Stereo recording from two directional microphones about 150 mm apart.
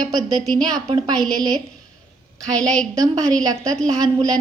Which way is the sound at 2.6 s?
5° left (ahead or behind).